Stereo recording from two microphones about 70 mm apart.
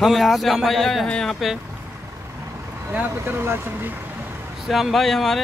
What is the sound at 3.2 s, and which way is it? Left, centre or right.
Speech, right.